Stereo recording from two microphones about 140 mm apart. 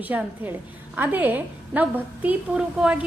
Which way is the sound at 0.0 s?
10° right (ahead or behind).